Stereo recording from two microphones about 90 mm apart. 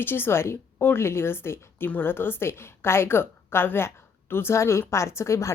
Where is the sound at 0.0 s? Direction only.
25° left (ahead or behind).